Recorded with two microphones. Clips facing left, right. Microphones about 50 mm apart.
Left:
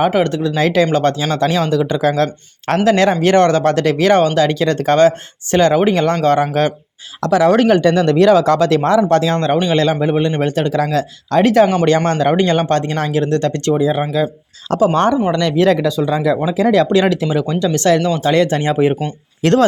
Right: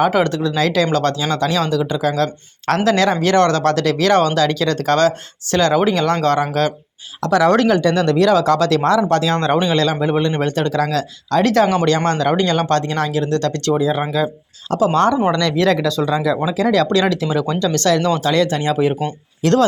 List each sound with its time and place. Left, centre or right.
0.0 s speech: centre
0.5 s speech: left
1.8 s speech: left
2.6 s speech: centre
7.3 s speech: centre
7.7 s speech: left
9.7 s speech: left
11.5 s speech: centre
11.9 s speech: left
14.0 s speech: centre
14.8 s speech: left
19.4 s speech: left